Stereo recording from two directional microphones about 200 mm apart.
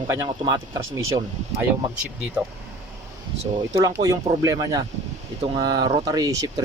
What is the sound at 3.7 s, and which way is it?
Speech, 20° right (ahead or behind).